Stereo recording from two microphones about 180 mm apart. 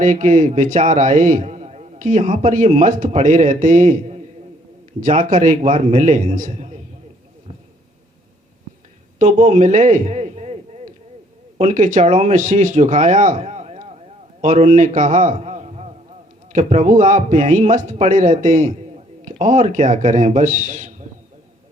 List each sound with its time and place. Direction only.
0.0 s a man's voice: 45° right (ahead or behind)
9.1 s a sound: 40° right (ahead or behind)
11.5 s a man's voice: 40° right (ahead or behind)